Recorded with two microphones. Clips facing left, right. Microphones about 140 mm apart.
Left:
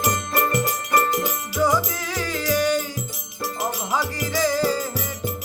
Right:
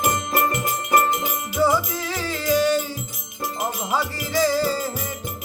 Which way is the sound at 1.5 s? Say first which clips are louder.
Right 1 dB; 10° right (ahead or behind).